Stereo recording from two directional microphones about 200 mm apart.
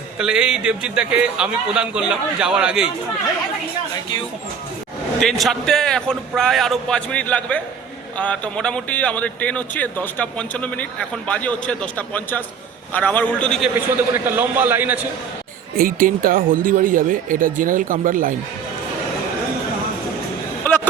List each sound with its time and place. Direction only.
0.2 s a man's voice: 5° right (ahead or behind)
5.2 s a man's voice: centre (ahead or behind)
14.1 s a man's voice: 10° right (ahead or behind)
15.7 s speech: 45° right (ahead or behind)